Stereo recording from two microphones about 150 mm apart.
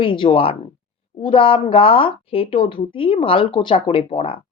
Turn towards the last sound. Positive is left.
turn(degrees=40)  # may be behind; listen again after turning